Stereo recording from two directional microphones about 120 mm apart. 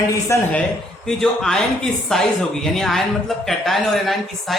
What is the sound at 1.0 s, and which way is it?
Speech, 5° left (ahead or behind).